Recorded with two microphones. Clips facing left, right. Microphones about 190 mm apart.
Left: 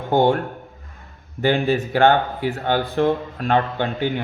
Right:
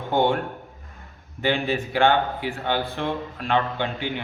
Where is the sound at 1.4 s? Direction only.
45° left (ahead or behind).